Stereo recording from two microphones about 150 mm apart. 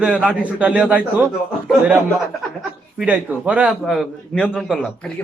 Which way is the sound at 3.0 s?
10° right (ahead or behind).